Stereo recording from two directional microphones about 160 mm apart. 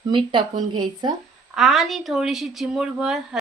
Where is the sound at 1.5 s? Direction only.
Centre (ahead or behind).